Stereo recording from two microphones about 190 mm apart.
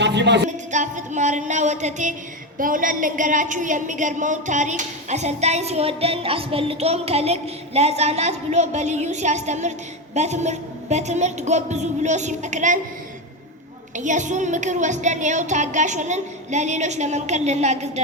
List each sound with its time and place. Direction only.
0.0 s speech: 65° right (ahead or behind)
0.7 s a woman's voice: 40° right (ahead or behind)
13.9 s a woman's voice: 40° right (ahead or behind)